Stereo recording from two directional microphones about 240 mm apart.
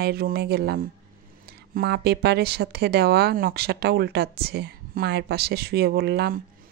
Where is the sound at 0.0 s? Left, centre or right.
Right.